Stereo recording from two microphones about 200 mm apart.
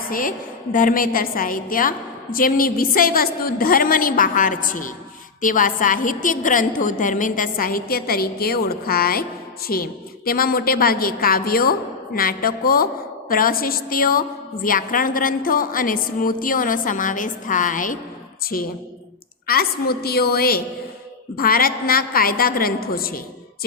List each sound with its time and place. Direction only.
0.1 s a woman's voice: 45° left (ahead or behind)